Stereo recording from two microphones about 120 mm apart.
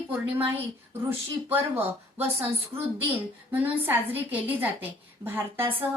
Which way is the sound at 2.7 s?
50° right (ahead or behind).